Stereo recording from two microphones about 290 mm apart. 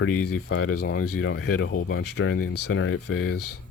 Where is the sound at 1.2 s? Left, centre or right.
Left.